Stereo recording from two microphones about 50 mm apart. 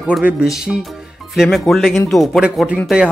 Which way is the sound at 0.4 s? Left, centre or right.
Centre.